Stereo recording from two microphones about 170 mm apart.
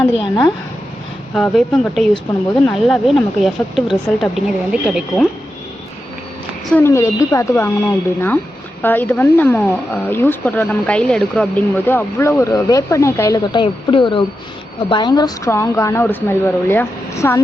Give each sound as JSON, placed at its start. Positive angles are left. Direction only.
{"t": 0.2, "sound": "speech", "side_deg": 25}
{"t": 1.3, "sound": "a woman's voice", "side_deg": 0}
{"t": 6.7, "sound": "speech", "side_deg": 15}